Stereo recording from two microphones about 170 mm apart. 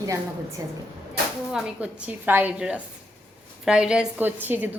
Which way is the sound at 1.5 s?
5° right (ahead or behind).